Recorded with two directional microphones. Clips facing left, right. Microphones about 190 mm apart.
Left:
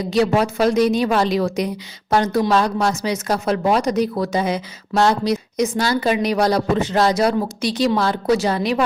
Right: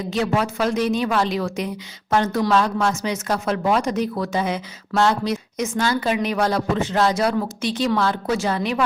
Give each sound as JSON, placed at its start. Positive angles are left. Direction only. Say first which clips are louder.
{"t": 0.3, "sound": "speech", "louder": "left 3 dB", "side_deg": 35}